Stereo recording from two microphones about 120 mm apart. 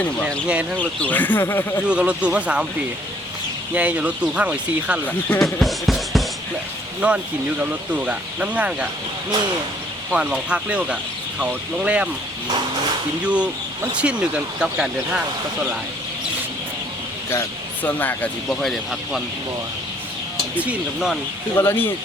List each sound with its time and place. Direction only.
0.4 s speech: 10° right (ahead or behind)
0.8 s speech: 15° left (ahead or behind)
1.9 s speech: 10° right (ahead or behind)
3.8 s speech: 10° right (ahead or behind)
5.4 s music: centre (ahead or behind)
7.0 s speech: 10° right (ahead or behind)
10.1 s speech: 10° right (ahead or behind)
13.2 s speech: 10° right (ahead or behind)
17.8 s speech: 15° left (ahead or behind)
18.6 s music: centre (ahead or behind)
20.6 s speech: 5° right (ahead or behind)
21.5 s speech: 20° left (ahead or behind)